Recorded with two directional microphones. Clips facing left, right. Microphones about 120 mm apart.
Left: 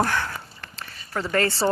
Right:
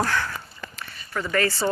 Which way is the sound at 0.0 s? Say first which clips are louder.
Left 1 dB; 20° left (ahead or behind).